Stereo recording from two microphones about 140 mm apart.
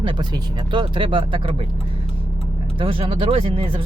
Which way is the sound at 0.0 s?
35° right (ahead or behind).